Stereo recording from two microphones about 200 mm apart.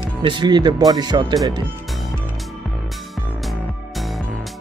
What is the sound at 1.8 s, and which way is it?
Music, centre (ahead or behind).